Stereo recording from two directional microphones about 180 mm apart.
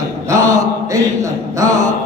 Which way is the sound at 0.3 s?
20° right (ahead or behind).